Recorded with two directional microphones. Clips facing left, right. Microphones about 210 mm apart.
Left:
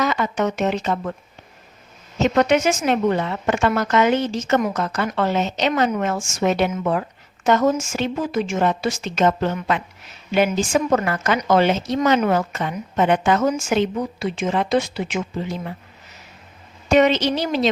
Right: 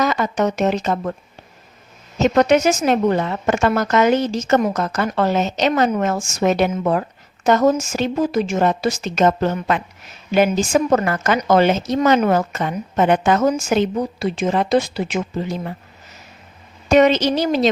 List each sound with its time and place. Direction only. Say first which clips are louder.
0.0 s a woman's voice: right 2 dB; 40° right (ahead or behind)
2.1 s a woman's voice: right 3 dB; 40° right (ahead or behind)
16.9 s a woman's voice: right 2 dB; 40° right (ahead or behind)